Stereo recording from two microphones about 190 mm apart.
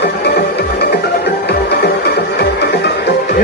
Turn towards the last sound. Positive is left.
turn(degrees=60)  # may be behind; listen again after turning